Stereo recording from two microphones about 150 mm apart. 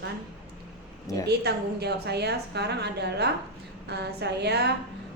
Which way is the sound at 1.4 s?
90° right.